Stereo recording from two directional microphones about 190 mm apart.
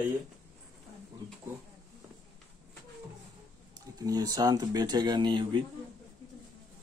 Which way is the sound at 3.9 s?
20° right (ahead or behind).